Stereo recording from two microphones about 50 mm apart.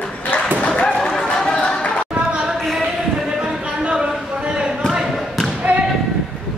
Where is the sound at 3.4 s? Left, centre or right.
Centre.